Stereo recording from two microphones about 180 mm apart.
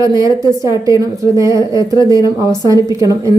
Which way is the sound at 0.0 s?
20° right (ahead or behind).